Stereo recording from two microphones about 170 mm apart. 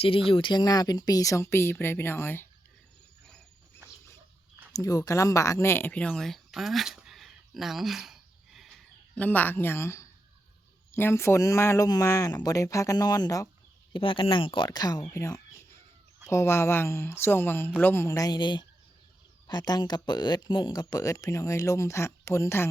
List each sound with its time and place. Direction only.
0.0 s speech: 30° left (ahead or behind); by 2.5 s 15° left (ahead or behind)
3.8 s dog: 15° right (ahead or behind)
4.7 s speech: 20° left (ahead or behind); by 8.7 s centre (ahead or behind)
9.1 s a woman's voice: 10° left (ahead or behind)